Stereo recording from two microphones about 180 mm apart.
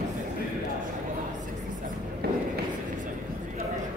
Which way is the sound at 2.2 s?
60° right (ahead or behind).